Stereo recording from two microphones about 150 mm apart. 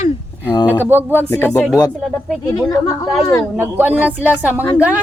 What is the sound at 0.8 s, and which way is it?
Speech, 15° right (ahead or behind).